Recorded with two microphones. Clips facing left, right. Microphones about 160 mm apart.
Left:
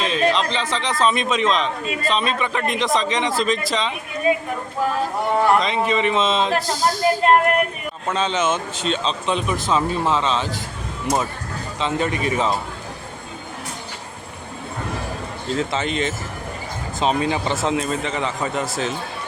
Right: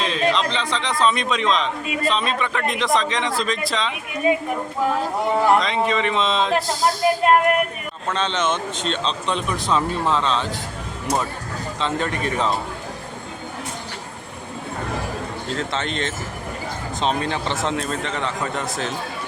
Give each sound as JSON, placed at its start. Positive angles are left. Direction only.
{"t": 0.0, "sound": "a man's voice", "side_deg": 0}
{"t": 4.3, "sound": "speech", "side_deg": -15}
{"t": 5.5, "sound": "a man's voice", "side_deg": 0}
{"t": 11.8, "sound": "a man's voice", "side_deg": 5}
{"t": 15.5, "sound": "a man's voice", "side_deg": 5}